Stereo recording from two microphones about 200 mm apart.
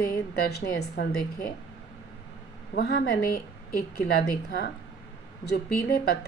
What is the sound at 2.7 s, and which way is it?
A woman's voice, 55° left (ahead or behind).